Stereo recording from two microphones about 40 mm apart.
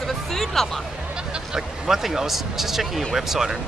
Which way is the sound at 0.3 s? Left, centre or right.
Centre.